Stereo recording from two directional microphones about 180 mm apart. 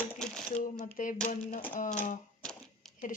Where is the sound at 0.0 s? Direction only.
5° left (ahead or behind).